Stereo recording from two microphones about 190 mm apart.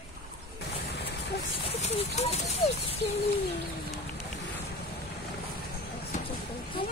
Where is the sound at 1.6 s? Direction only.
35° left (ahead or behind).